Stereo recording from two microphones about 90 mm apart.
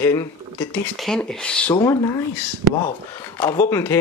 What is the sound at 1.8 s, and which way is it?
Speech, 35° left (ahead or behind).